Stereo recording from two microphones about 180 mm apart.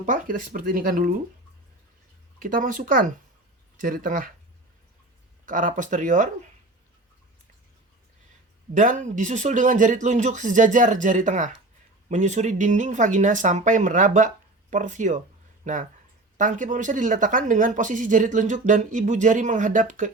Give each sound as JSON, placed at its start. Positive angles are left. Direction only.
{"t": 0.0, "sound": "speech", "side_deg": -50}
{"t": 2.4, "sound": "speech", "side_deg": -50}
{"t": 5.5, "sound": "speech", "side_deg": -45}
{"t": 8.7, "sound": "speech", "side_deg": -45}